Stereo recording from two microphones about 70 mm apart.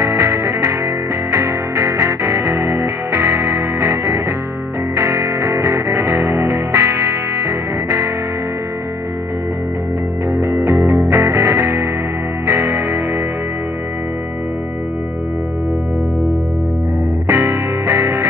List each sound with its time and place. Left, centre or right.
0.0 s music: right
2.0 s music: right
10.3 s music: right
17.3 s music: right